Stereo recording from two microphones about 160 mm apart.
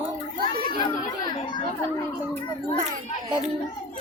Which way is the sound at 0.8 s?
25° left (ahead or behind).